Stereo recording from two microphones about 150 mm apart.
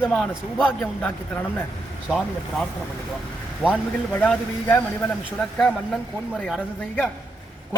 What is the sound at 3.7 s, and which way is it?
A man's voice, 10° left (ahead or behind).